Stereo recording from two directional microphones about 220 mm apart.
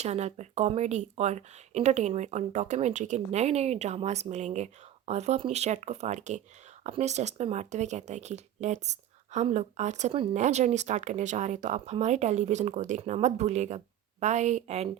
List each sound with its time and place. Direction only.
0.0 s speech: 30° right (ahead or behind)